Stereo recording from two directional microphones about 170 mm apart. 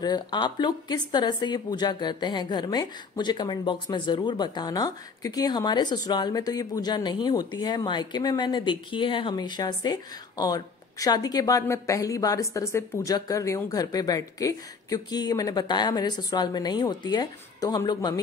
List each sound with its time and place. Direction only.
0.0 s a woman's voice: 25° left (ahead or behind)